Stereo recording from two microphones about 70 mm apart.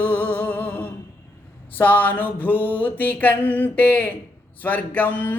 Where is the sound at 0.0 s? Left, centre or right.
Left.